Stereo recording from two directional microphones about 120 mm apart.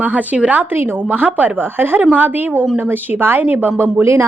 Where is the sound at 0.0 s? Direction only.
15° right (ahead or behind).